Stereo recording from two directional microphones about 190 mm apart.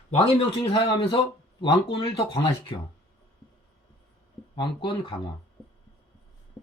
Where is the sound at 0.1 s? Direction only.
30° left (ahead or behind).